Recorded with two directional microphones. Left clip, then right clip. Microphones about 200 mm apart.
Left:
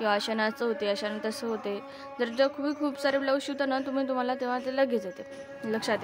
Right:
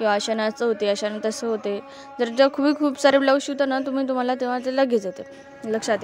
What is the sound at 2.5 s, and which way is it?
Speech, 45° right (ahead or behind).